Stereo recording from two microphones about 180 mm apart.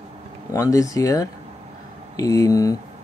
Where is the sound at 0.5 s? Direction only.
20° left (ahead or behind).